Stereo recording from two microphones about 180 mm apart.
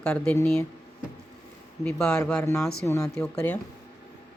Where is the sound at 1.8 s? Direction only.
5° left (ahead or behind).